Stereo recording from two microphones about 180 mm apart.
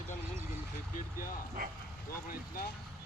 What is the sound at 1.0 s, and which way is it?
Speech, 50° left (ahead or behind).